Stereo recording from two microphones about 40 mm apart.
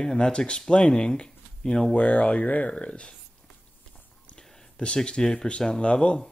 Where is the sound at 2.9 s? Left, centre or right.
Left.